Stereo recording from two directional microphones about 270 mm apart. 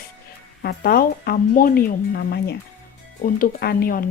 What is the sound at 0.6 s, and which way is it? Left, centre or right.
Speech, left.